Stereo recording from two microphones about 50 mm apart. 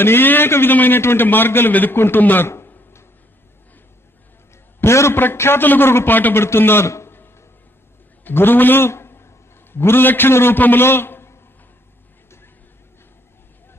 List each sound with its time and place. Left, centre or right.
0.0 s a man's voice: left
4.7 s a man's voice: left
5.2 s a man's voice: left
7.1 s a sound: left
8.2 s a man's voice: left